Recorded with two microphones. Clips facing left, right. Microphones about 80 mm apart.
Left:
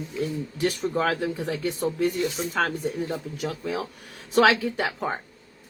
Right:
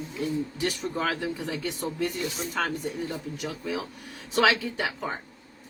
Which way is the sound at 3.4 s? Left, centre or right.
Left.